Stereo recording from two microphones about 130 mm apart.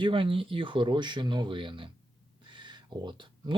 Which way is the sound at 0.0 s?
40° right (ahead or behind).